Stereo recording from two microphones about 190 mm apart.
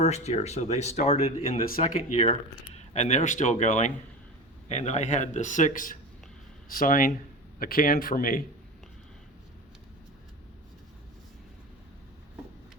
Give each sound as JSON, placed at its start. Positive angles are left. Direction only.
{"t": 0.0, "sound": "speech", "side_deg": 35}
{"t": 1.6, "sound": "speech", "side_deg": 40}